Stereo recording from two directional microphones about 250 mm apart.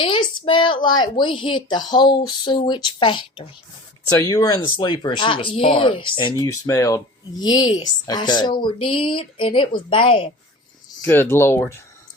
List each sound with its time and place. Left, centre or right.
0.0 s speech: centre
11.0 s speech: centre